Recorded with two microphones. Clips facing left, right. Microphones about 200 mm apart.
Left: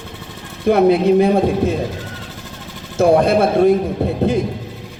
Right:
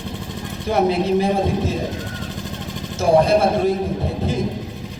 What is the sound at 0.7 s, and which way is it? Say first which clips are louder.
Speech: left 6 dB; 60° left (ahead or behind).